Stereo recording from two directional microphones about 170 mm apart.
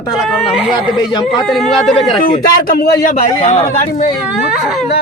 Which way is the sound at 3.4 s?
45° left (ahead or behind).